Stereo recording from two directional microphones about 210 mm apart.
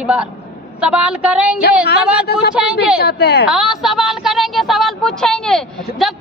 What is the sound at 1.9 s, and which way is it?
Speech, 50° left (ahead or behind).